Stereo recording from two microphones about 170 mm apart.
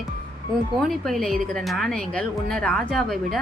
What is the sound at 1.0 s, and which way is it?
A woman's voice, centre (ahead or behind).